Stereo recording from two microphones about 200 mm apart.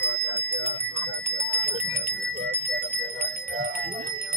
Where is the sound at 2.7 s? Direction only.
50° right (ahead or behind).